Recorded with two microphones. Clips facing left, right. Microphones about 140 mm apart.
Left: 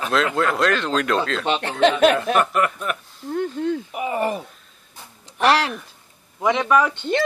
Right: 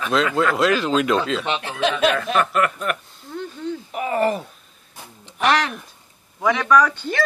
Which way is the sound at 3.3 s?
55° left (ahead or behind).